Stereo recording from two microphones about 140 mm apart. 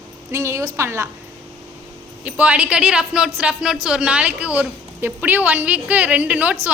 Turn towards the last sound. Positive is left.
turn(degrees=-10)  # may be behind; listen again after turning